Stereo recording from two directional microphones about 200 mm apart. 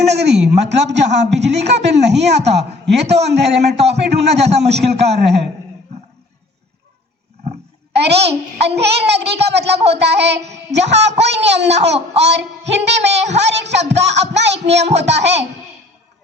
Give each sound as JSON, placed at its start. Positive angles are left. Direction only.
{"t": 0.1, "sound": "a man's voice", "side_deg": -55}
{"t": 7.9, "sound": "a man's voice", "side_deg": -55}
{"t": 10.5, "sound": "child singing", "side_deg": -60}
{"t": 11.2, "sound": "a man's voice", "side_deg": -60}
{"t": 13.1, "sound": "a woman's voice", "side_deg": -35}
{"t": 13.4, "sound": "a man's voice", "side_deg": -60}